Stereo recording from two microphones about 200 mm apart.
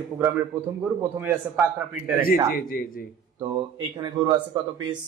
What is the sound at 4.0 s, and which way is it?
Speech, 20° right (ahead or behind).